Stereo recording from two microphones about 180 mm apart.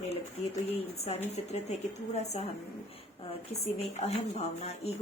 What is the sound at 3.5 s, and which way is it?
A woman's voice, 35° left (ahead or behind).